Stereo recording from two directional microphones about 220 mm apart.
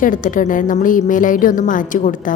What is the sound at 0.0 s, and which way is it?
A woman's voice, 35° left (ahead or behind).